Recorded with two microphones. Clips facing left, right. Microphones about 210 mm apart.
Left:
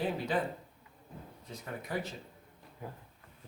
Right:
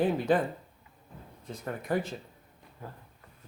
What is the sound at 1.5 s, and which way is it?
Speech, 50° right (ahead or behind).